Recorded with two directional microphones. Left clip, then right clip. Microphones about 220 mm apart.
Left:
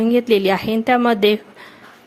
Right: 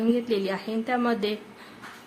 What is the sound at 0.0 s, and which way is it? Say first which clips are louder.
Speech: left 10 dB; 35° left (ahead or behind).